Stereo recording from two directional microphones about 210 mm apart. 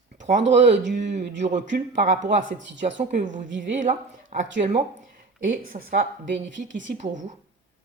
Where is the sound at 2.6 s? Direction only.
60° right (ahead or behind).